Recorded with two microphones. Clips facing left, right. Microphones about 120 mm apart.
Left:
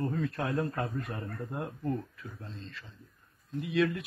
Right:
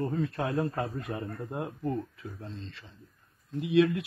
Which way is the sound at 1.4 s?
15° right (ahead or behind).